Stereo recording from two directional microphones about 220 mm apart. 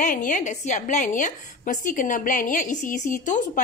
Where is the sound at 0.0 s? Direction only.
35° left (ahead or behind).